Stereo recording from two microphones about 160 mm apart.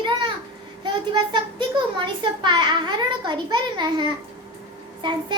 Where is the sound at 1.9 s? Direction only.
30° right (ahead or behind).